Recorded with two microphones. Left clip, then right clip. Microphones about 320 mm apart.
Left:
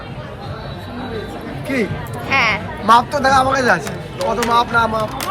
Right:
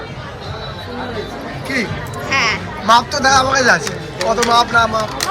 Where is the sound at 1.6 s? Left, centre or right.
Centre.